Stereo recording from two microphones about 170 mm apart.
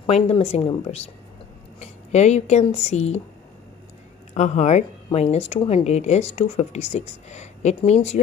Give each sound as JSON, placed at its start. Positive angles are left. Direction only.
{"t": 0.0, "sound": "a woman's voice", "side_deg": 35}
{"t": 1.8, "sound": "a sound", "side_deg": 40}
{"t": 2.9, "sound": "a woman's voice", "side_deg": 40}
{"t": 4.3, "sound": "a woman's voice", "side_deg": 40}